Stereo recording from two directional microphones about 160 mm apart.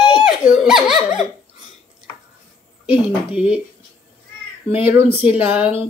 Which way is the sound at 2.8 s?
10° right (ahead or behind).